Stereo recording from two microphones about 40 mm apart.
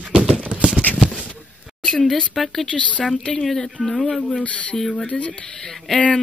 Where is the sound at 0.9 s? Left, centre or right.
Left.